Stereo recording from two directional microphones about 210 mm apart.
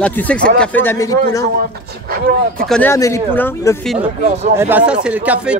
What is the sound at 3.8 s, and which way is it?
Speech, centre (ahead or behind).